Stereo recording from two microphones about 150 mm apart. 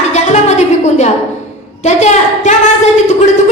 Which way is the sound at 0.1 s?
50° left (ahead or behind).